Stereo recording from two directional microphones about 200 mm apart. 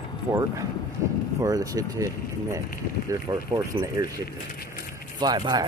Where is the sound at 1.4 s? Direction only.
15° right (ahead or behind).